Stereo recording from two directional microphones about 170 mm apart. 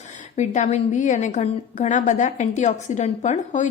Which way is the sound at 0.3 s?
45° left (ahead or behind).